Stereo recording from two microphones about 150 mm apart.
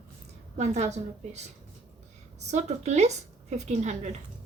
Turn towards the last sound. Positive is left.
turn(degrees=-50)  # may be behind; listen again after turning